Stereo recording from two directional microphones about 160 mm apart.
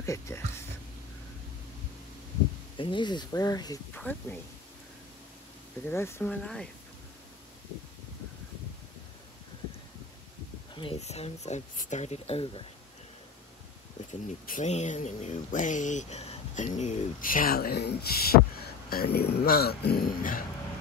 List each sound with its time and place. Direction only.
0.0 s speech: 15° left (ahead or behind)
2.8 s speech: 30° left (ahead or behind)
3.9 s speech: 10° left (ahead or behind)
5.9 s speech: 15° left (ahead or behind)
10.7 s speech: 35° left (ahead or behind)
14.2 s speech: 50° left (ahead or behind); by 20.4 s 65° left (ahead or behind)